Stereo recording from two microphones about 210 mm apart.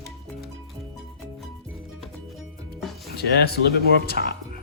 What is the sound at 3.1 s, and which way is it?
Speech, 50° left (ahead or behind).